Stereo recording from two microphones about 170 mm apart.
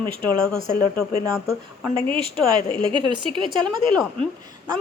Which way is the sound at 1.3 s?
Centre (ahead or behind).